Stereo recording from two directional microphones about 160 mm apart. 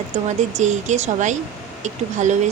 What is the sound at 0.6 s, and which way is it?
Speech, 50° right (ahead or behind).